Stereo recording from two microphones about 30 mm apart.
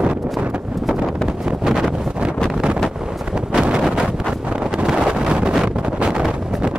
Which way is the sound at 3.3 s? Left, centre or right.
Right.